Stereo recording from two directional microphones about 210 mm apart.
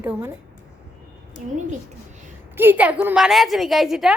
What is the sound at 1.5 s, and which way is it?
Speech, 35° right (ahead or behind).